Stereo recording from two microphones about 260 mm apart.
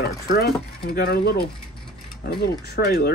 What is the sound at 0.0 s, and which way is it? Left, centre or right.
Speech, left.